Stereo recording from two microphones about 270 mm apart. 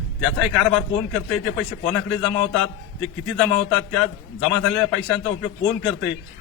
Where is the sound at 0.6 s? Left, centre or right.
Centre.